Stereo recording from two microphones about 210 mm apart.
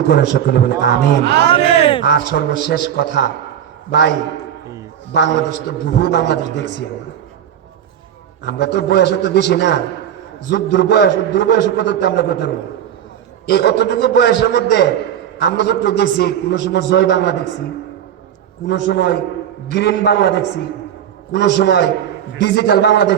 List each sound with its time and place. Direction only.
0.1 s a man's voice: 50° left (ahead or behind)
1.2 s a man's voice: 55° right (ahead or behind)
1.5 s a sound: 25° left (ahead or behind)
2.0 s a man's voice: 50° left (ahead or behind)
5.1 s a man's voice: 55° left (ahead or behind)
8.4 s a man's voice: 55° left (ahead or behind)
13.5 s a man's voice: 55° left (ahead or behind)
18.7 s a man's voice: 50° left (ahead or behind)